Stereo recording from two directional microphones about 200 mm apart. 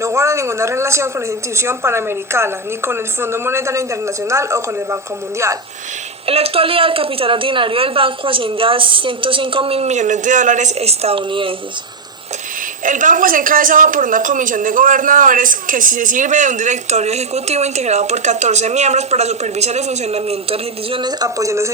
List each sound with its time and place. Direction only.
0.0 s a woman's voice: 15° right (ahead or behind)
6.2 s a woman's voice: 30° right (ahead or behind)
12.8 s speech: 40° right (ahead or behind); by 21.7 s 15° right (ahead or behind)